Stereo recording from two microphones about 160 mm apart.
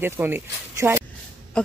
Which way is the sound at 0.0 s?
15° right (ahead or behind).